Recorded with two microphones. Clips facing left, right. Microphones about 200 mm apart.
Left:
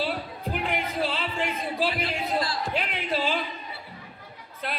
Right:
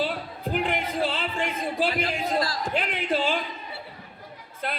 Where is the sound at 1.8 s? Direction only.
45° right (ahead or behind).